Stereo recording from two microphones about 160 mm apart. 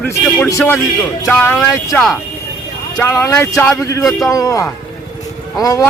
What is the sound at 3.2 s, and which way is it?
Speech, 15° left (ahead or behind).